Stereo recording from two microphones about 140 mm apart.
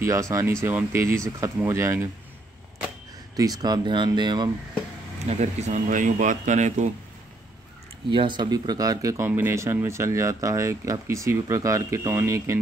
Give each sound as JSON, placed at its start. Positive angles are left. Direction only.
{"t": 0.0, "sound": "speech", "side_deg": -20}
{"t": 3.3, "sound": "speech", "side_deg": -25}
{"t": 5.3, "sound": "speech", "side_deg": -55}
{"t": 8.1, "sound": "speech", "side_deg": -35}